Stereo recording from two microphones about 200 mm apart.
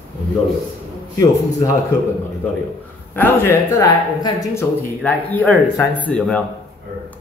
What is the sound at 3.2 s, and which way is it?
Speech, 10° left (ahead or behind).